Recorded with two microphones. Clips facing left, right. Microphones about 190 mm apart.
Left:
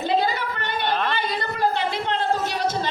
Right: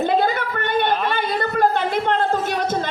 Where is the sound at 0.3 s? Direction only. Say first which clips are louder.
Right 6 dB; 50° right (ahead or behind).